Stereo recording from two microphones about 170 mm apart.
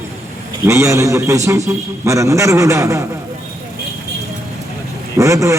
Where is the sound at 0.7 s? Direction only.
15° right (ahead or behind).